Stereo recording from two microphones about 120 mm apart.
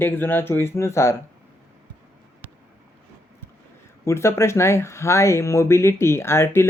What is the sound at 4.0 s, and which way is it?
Speech, 25° left (ahead or behind).